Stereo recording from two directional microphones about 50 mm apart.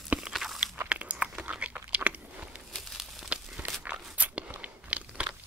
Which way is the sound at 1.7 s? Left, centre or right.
Right.